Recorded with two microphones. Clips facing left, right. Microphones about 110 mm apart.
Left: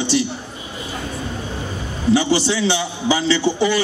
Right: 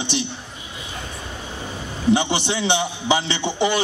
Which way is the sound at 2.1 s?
20° right (ahead or behind).